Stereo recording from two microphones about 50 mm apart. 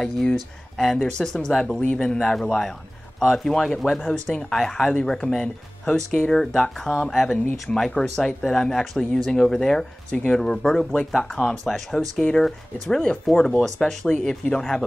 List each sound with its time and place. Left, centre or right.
0.0 s speech: centre
7.9 s speech: centre
12.2 s speech: centre